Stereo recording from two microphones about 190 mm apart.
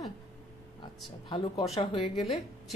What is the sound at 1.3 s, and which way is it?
Speech, 25° left (ahead or behind).